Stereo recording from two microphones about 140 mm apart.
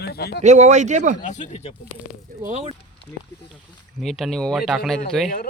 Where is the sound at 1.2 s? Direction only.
60° left (ahead or behind).